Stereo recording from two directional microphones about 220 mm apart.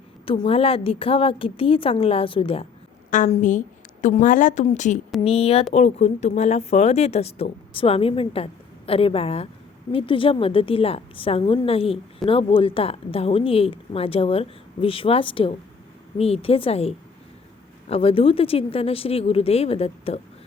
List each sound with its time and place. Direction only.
0.3 s a woman's voice: 25° left (ahead or behind)
3.1 s a woman's voice: 35° left (ahead or behind)